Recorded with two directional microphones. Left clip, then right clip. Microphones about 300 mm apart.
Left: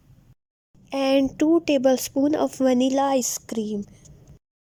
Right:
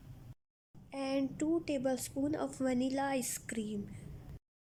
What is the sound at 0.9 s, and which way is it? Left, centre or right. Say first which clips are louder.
A woman's voice: left 16 dB; left.